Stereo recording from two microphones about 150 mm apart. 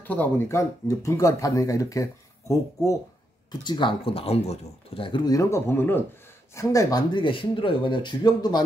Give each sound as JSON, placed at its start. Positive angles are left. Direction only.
{"t": 0.0, "sound": "speech", "side_deg": 10}